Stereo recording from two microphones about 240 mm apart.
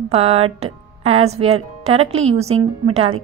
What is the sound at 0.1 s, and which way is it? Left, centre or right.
A woman's voice, right.